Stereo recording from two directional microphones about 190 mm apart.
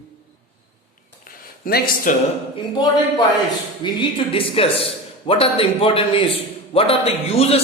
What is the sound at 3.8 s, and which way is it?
A man's voice, 25° left (ahead or behind).